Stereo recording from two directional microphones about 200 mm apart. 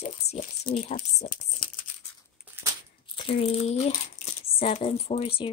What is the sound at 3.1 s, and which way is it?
Speech, 30° left (ahead or behind).